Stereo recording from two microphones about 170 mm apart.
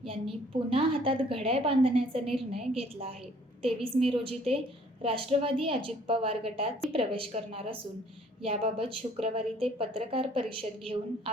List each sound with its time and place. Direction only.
0.7 s a woman's voice: 30° right (ahead or behind)